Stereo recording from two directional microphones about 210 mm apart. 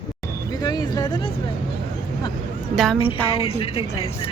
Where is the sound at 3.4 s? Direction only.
30° left (ahead or behind).